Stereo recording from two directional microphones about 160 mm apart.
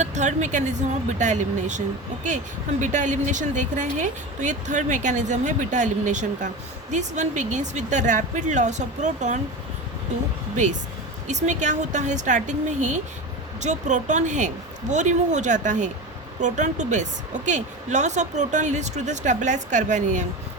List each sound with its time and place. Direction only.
0.0 s a woman's voice: 50° right (ahead or behind)
2.8 s a woman's voice: 50° right (ahead or behind)
10.6 s a woman's voice: 50° right (ahead or behind)